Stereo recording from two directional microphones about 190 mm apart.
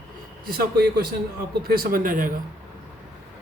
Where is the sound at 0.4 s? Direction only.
50° right (ahead or behind).